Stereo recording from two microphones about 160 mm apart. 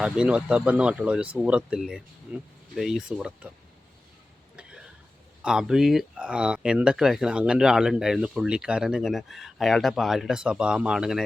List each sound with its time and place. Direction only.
0.0 s speech: 5° right (ahead or behind)
5.4 s speech: 5° right (ahead or behind)